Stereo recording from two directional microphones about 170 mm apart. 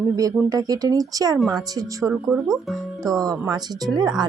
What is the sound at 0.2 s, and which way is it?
Speech, 20° right (ahead or behind).